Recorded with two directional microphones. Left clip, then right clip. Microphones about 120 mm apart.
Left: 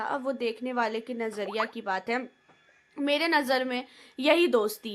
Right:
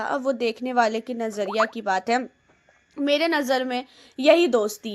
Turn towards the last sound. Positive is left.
turn(degrees=-25)  # may be behind; listen again after turning